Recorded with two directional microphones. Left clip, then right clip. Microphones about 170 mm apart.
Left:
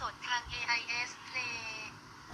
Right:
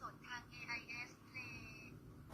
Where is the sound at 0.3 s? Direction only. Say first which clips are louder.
Left 16 dB; 50° left (ahead or behind).